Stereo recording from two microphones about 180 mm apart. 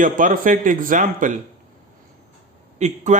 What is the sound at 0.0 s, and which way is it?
Speech, 50° right (ahead or behind).